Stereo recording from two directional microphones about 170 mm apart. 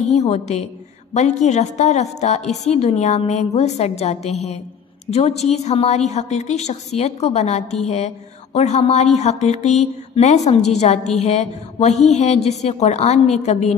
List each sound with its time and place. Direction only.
0.0 s a woman's voice: 40° left (ahead or behind)